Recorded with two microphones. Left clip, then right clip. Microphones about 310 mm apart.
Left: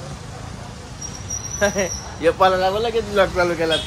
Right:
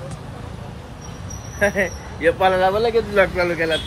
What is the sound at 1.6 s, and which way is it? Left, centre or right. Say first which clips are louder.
Speech: right 1 dB; centre.